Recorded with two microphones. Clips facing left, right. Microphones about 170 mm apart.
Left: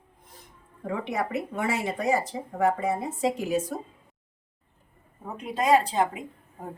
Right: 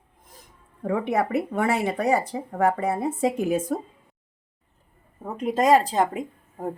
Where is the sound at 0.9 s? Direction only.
55° right (ahead or behind).